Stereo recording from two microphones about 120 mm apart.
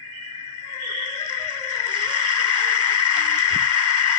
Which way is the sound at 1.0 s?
40° right (ahead or behind).